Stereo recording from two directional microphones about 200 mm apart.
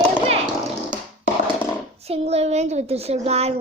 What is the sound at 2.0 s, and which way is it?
A woman's voice, 30° right (ahead or behind).